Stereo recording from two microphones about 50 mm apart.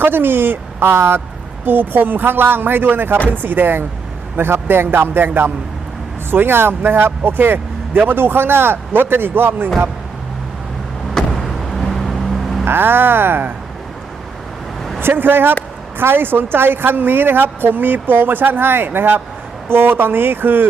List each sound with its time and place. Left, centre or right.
0.0 s speech: right
1.6 s speech: right
11.1 s vehicle: centre
12.6 s speech: right
15.0 s speech: right